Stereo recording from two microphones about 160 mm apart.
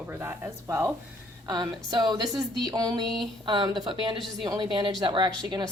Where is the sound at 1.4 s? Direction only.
25° right (ahead or behind).